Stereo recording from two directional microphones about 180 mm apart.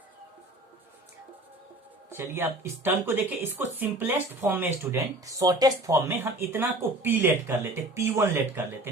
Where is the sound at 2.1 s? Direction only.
15° right (ahead or behind).